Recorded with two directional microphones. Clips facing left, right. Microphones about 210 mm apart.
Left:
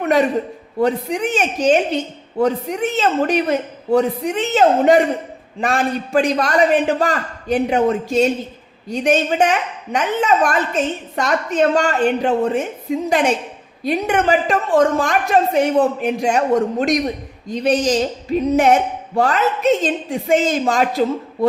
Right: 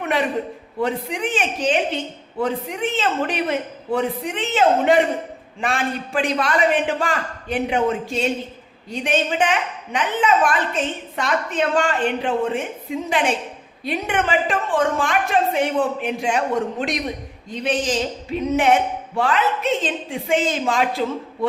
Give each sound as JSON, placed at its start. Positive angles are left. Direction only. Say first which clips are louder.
{"t": 0.0, "sound": "a man's voice", "louder": "left 6 dB", "side_deg": 40}
{"t": 17.5, "sound": "a woman's voice", "louder": "left 6 dB", "side_deg": 40}